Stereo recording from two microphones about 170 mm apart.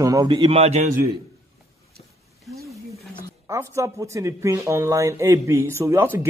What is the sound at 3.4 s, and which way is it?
Speech, 15° right (ahead or behind).